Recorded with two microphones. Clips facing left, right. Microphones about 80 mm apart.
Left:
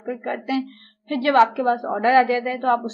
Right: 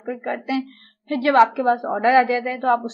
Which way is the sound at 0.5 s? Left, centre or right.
Centre.